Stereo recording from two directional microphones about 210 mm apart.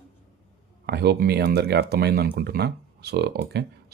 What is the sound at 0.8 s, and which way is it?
Speech, 50° right (ahead or behind).